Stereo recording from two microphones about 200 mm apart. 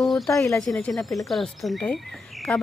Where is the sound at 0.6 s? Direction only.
5° left (ahead or behind).